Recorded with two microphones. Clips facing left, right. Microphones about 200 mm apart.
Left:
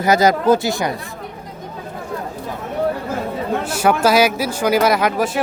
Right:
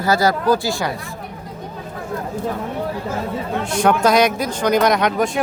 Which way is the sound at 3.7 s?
5° left (ahead or behind).